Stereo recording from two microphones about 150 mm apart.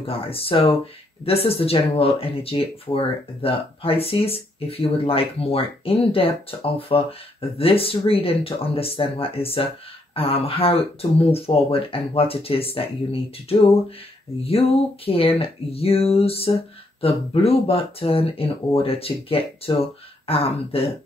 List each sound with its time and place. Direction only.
0.0 s speech: 40° left (ahead or behind)
15.0 s speech: 40° left (ahead or behind)